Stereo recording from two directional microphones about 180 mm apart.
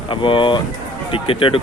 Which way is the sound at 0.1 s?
30° left (ahead or behind).